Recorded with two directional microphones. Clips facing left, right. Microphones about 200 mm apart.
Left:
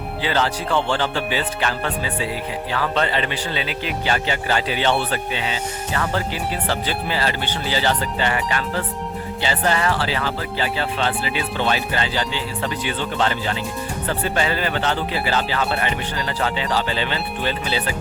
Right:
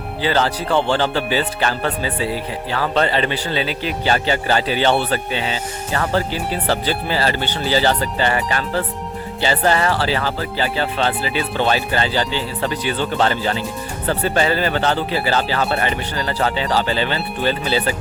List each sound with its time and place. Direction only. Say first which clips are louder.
0.2 s speech: right 3 dB; 35° right (ahead or behind)